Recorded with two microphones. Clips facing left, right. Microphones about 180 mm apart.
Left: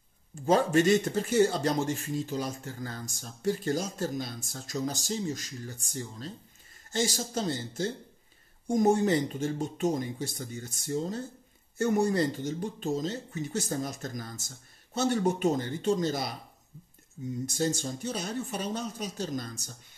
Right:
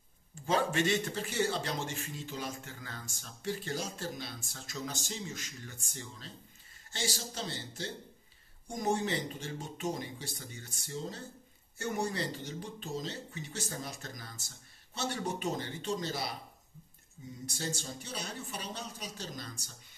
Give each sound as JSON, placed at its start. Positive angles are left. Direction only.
{"t": 0.5, "sound": "speech", "side_deg": 45}
{"t": 17.5, "sound": "speech", "side_deg": 45}